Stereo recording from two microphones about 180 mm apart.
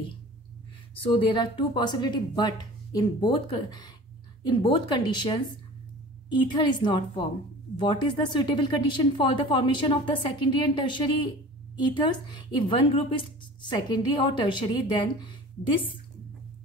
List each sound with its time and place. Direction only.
0.9 s speech: 30° left (ahead or behind)
12.3 s speech: 25° left (ahead or behind)